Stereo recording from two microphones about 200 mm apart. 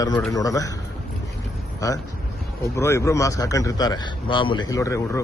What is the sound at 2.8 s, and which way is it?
A man's voice, 15° left (ahead or behind).